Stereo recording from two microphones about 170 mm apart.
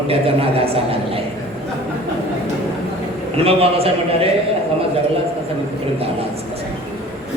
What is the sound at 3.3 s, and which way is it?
Speech, 35° right (ahead or behind).